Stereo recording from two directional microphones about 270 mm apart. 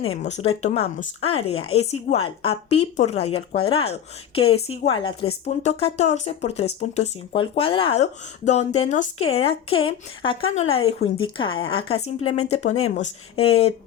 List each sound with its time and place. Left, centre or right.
0.0 s a woman's voice: left